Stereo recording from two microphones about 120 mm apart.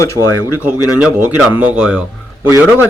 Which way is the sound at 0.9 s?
5° right (ahead or behind).